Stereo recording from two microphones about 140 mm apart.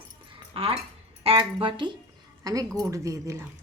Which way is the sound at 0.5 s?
45° right (ahead or behind).